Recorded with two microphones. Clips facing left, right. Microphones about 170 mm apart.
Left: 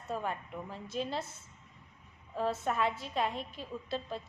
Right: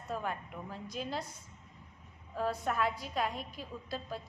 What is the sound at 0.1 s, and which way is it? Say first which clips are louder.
A woman's voice: left 1 dB; centre (ahead or behind).